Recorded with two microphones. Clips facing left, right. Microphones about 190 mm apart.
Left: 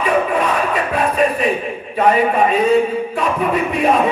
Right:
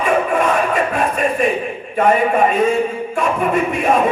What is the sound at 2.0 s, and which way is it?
A man's voice, 50° right (ahead or behind).